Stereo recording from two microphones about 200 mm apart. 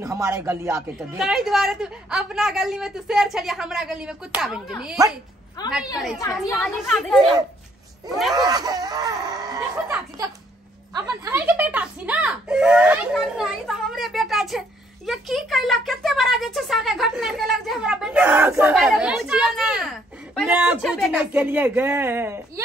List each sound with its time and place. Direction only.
0.0 s a man's voice: 15° right (ahead or behind)
0.9 s speech: centre (ahead or behind)
6.1 s speech: 15° left (ahead or behind)
8.4 s speech: 20° right (ahead or behind)
11.2 s a sound: 10° right (ahead or behind)
15.0 s speech: centre (ahead or behind)